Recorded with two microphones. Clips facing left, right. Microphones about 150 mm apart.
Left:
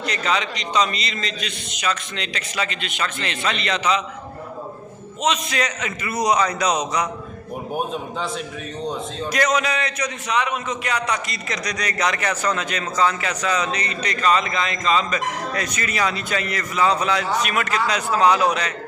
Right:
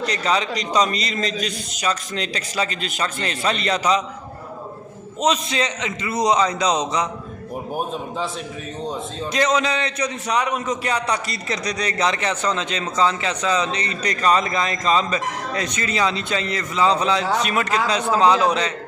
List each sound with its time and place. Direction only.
0.0 s a man's voice: 35° right (ahead or behind)
5.2 s a man's voice: 30° right (ahead or behind)
7.7 s a man's voice: centre (ahead or behind)
9.3 s a man's voice: 25° right (ahead or behind)